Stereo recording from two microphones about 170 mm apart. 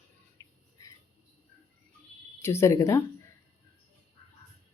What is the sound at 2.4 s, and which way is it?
Speech, 15° left (ahead or behind).